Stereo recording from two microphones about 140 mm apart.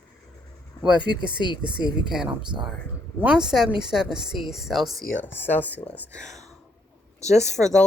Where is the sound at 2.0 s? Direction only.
5° right (ahead or behind).